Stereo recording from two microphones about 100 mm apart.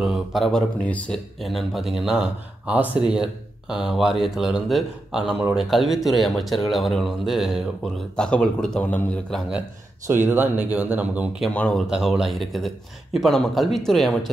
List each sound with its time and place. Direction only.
0.0 s speech: centre (ahead or behind); by 1.2 s 15° left (ahead or behind)
1.4 s speech: centre (ahead or behind); by 9.2 s 15° left (ahead or behind)
10.0 s speech: 20° right (ahead or behind)
11.5 s speech: 10° left (ahead or behind)
11.9 s speech: 5° right (ahead or behind)